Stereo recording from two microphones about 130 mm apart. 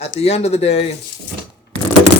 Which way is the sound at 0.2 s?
55° left (ahead or behind).